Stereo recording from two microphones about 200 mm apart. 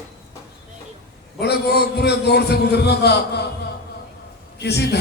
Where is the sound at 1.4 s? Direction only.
55° left (ahead or behind).